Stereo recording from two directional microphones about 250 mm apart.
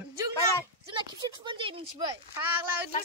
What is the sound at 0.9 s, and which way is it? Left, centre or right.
Speech, centre.